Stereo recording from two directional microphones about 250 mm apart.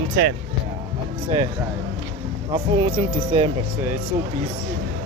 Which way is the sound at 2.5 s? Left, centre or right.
Centre.